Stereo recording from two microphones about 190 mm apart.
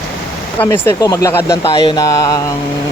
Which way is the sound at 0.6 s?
10° left (ahead or behind).